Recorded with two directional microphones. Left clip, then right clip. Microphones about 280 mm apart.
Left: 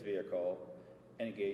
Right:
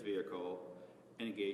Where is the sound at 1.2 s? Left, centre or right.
Right.